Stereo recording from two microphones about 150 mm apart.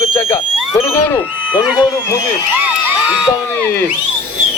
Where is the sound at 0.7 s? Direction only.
20° left (ahead or behind).